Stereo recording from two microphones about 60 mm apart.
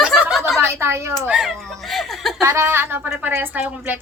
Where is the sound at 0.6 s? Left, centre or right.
Right.